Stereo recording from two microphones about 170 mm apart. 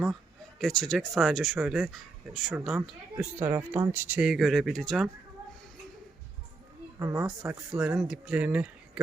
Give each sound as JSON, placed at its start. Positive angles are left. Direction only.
{"t": 0.6, "sound": "speech", "side_deg": 5}
{"t": 3.3, "sound": "speech", "side_deg": -15}
{"t": 7.0, "sound": "speech", "side_deg": -15}
{"t": 7.3, "sound": "speech", "side_deg": -5}